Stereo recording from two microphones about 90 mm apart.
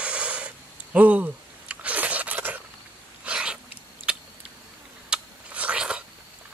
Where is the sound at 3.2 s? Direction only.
10° right (ahead or behind).